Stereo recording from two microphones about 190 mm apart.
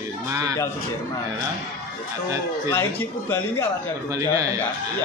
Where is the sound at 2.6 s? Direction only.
10° left (ahead or behind).